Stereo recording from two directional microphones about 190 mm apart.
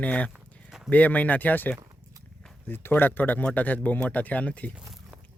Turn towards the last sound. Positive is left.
turn(degrees=-5)  # may be behind; listen again after turning